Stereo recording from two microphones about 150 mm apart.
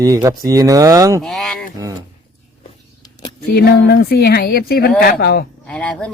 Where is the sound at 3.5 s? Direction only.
90° left.